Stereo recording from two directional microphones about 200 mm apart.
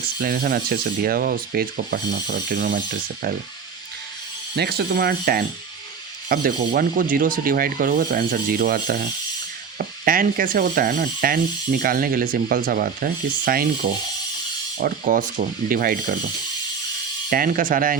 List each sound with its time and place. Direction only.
0.2 s speech: 50° right (ahead or behind)
4.5 s speech: 55° right (ahead or behind)
14.8 s speech: 45° right (ahead or behind)
17.2 s speech: 45° right (ahead or behind)